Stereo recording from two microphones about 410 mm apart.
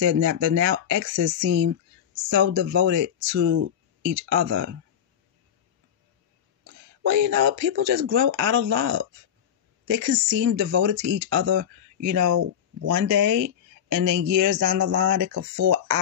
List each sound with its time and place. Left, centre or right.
0.0 s speech: right
6.6 s speech: right
9.8 s a woman's voice: right
11.3 s speech: right
12.0 s speech: right